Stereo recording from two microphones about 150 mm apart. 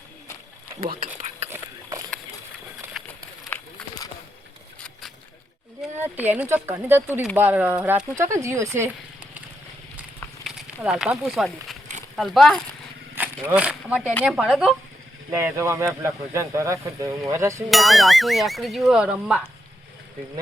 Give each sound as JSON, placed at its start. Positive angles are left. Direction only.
{"t": 0.8, "sound": "speech", "side_deg": -75}
{"t": 1.5, "sound": "a sound", "side_deg": -20}
{"t": 6.0, "sound": "speech", "side_deg": -10}
{"t": 10.4, "sound": "speech", "side_deg": 0}
{"t": 13.1, "sound": "speech", "side_deg": -10}
{"t": 15.3, "sound": "speech", "side_deg": -15}
{"t": 17.7, "sound": "speech", "side_deg": 0}